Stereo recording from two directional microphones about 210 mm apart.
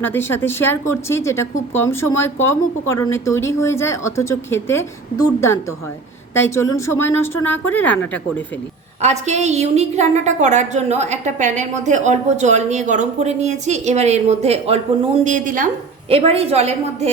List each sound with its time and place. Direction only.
0.0 s speech: 10° left (ahead or behind)
9.0 s a woman's voice: 30° right (ahead or behind)